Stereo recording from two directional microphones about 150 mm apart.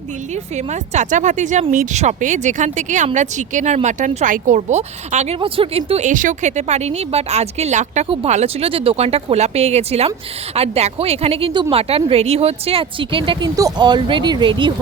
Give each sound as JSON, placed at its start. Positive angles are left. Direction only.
{"t": 0.5, "sound": "speech", "side_deg": -50}
{"t": 6.1, "sound": "speech", "side_deg": -60}